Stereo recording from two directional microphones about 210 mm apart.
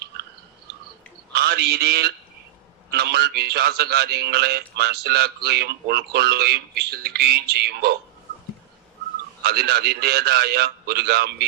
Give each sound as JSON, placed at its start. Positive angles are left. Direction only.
{"t": 1.3, "sound": "a man's voice", "side_deg": -50}
{"t": 9.4, "sound": "a man's voice", "side_deg": -50}